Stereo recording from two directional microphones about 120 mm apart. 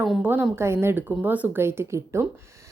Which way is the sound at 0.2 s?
15° right (ahead or behind).